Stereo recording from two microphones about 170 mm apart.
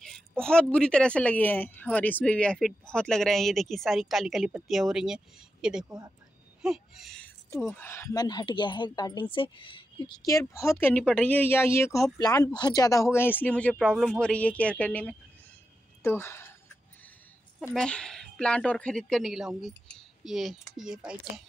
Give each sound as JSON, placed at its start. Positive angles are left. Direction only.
{"t": 0.0, "sound": "speech", "side_deg": 0}
{"t": 7.5, "sound": "speech", "side_deg": 15}
{"t": 17.7, "sound": "speech", "side_deg": 5}